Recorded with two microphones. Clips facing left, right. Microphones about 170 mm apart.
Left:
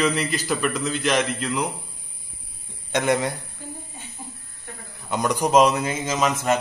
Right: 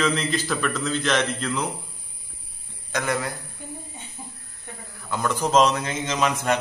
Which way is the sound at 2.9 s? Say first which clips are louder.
Left 5 dB; 20° left (ahead or behind).